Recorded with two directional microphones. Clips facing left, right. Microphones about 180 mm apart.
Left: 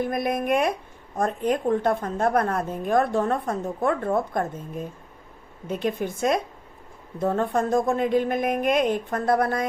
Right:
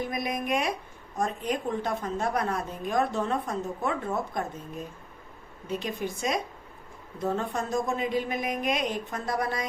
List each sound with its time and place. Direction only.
0.0 s a woman's voice: 55° left (ahead or behind)
5.6 s a woman's voice: 50° left (ahead or behind)